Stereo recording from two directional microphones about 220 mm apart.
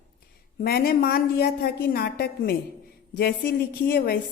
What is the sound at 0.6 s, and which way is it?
A woman's voice, 45° left (ahead or behind).